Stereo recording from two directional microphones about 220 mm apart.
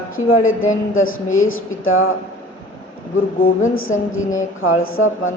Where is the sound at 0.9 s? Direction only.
65° left (ahead or behind).